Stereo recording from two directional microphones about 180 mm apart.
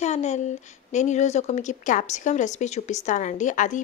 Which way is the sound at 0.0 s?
40° left (ahead or behind).